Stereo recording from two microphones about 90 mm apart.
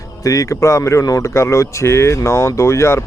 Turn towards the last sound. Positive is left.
turn(degrees=30)  # may be behind; listen again after turning